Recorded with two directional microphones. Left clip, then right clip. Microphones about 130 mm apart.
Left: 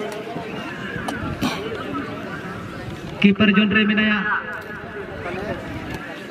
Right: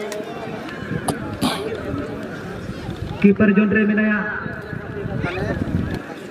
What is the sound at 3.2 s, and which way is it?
A man's voice, 25° left (ahead or behind).